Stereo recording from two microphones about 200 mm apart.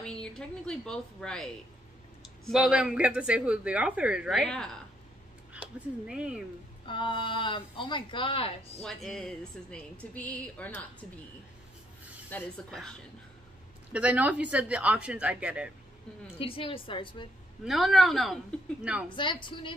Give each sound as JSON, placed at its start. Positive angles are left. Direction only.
{"t": 0.0, "sound": "a woman's voice", "side_deg": 5}
{"t": 6.9, "sound": "speech", "side_deg": 25}
{"t": 8.8, "sound": "speech", "side_deg": 0}
{"t": 12.3, "sound": "speech", "side_deg": 5}
{"t": 13.9, "sound": "speech", "side_deg": -5}
{"t": 16.3, "sound": "speech", "side_deg": 25}
{"t": 17.6, "sound": "speech", "side_deg": 0}
{"t": 19.1, "sound": "speech", "side_deg": 25}